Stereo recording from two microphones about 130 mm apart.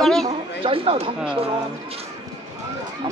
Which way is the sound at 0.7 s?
50° right (ahead or behind).